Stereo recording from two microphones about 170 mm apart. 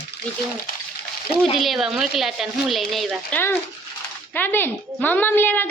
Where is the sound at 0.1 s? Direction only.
80° left.